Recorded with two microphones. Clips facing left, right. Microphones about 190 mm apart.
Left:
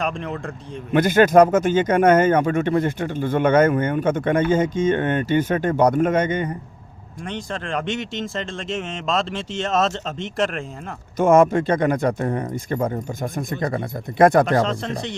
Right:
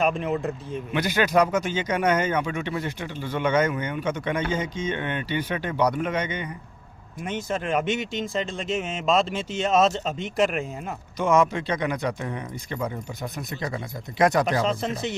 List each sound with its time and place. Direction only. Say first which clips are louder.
0.0 s speech: right 3 dB; 5° right (ahead or behind)
0.9 s speech: left 8 dB; 50° left (ahead or behind)
7.3 s speech: right 1 dB; 5° right (ahead or behind)
11.2 s speech: left 7 dB; 50° left (ahead or behind)
14.6 s speech: left 2 dB; 5° right (ahead or behind)